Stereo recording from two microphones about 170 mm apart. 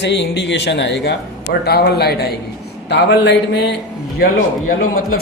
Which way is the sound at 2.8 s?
85° left.